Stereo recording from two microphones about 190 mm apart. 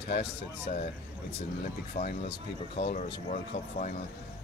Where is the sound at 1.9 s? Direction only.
40° left (ahead or behind).